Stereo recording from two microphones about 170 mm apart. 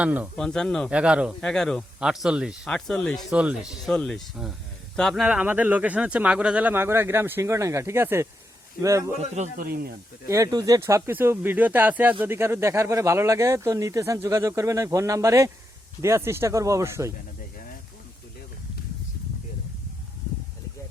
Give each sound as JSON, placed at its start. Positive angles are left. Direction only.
{"t": 0.0, "sound": "speech", "side_deg": -10}
{"t": 0.3, "sound": "speech", "side_deg": 5}
{"t": 9.3, "sound": "speech", "side_deg": -45}
{"t": 9.6, "sound": "speech", "side_deg": -60}
{"t": 10.2, "sound": "speech", "side_deg": -20}